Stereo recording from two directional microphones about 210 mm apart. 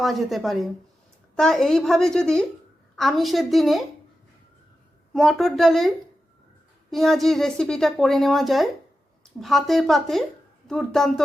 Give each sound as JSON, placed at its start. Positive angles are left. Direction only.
{"t": 0.0, "sound": "speech", "side_deg": 0}
{"t": 5.1, "sound": "speech", "side_deg": 0}
{"t": 6.9, "sound": "speech", "side_deg": 0}